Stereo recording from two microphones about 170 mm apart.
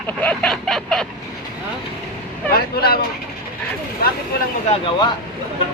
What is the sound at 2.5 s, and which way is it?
Speech, 65° left (ahead or behind).